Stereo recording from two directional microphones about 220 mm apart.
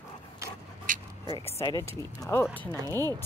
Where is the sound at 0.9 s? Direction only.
35° right (ahead or behind).